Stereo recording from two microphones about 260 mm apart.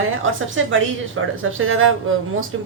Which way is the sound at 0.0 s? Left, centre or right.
Right.